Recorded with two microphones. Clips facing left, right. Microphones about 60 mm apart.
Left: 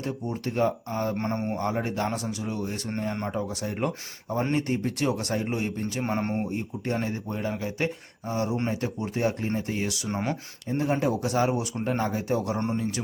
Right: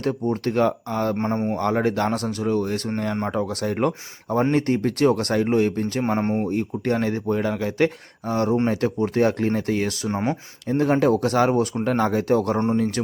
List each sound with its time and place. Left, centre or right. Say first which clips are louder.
0.0 s speech: right 8 dB; right
1.2 s speech: right 5 dB; right
1.5 s speech: right 7 dB; right
6.0 s speech: right 5 dB; right
6.5 s speech: right 7 dB; right
10.1 s speech: right 5 dB; right
10.7 s speech: right 7 dB; right